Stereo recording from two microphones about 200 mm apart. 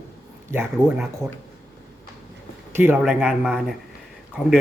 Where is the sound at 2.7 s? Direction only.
10° right (ahead or behind).